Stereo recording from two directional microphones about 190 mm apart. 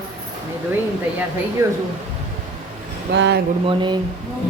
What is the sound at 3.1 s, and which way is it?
Speech, 70° right (ahead or behind).